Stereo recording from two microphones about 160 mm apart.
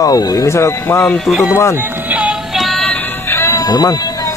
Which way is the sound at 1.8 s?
10° right (ahead or behind).